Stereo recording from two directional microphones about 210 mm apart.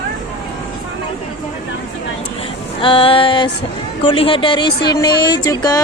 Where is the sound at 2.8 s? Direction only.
25° left (ahead or behind).